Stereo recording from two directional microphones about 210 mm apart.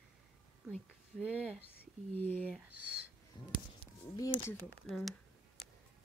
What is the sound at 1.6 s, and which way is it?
Speech, 10° left (ahead or behind).